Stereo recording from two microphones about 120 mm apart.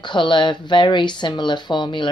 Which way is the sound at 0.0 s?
40° left (ahead or behind).